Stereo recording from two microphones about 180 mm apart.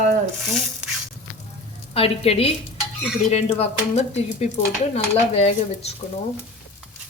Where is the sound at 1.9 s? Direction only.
35° left (ahead or behind).